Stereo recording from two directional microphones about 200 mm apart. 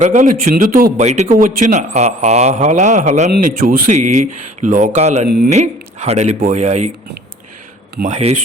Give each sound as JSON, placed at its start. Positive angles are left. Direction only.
{"t": 0.0, "sound": "a man's voice", "side_deg": -40}
{"t": 8.0, "sound": "a man's voice", "side_deg": -35}